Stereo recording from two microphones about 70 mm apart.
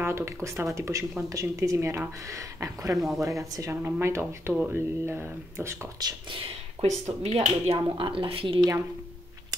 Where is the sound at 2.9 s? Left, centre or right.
Centre.